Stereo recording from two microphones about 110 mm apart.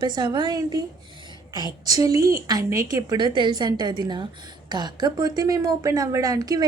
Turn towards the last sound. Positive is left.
turn(degrees=-35)  # may be behind; listen again after turning